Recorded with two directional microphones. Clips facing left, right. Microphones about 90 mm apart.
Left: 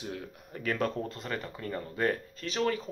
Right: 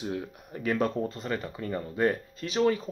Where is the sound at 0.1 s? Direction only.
15° right (ahead or behind).